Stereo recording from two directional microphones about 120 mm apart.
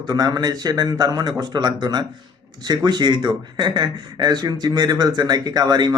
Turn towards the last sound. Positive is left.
turn(degrees=-35)  # may be behind; listen again after turning